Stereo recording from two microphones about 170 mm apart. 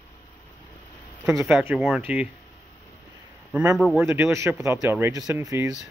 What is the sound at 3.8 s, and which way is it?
Speech, centre (ahead or behind).